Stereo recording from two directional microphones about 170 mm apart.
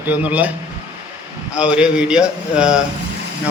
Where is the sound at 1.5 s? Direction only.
5° right (ahead or behind).